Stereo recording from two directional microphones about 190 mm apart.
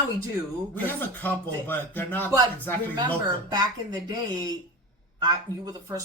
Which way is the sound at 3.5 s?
20° right (ahead or behind).